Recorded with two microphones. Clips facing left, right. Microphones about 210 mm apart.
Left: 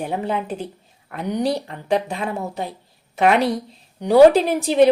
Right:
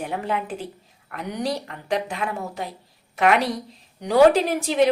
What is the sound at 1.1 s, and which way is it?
Speech, 30° left (ahead or behind).